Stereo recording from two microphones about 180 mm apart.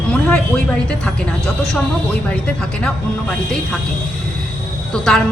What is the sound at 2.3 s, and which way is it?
Speech, 5° left (ahead or behind).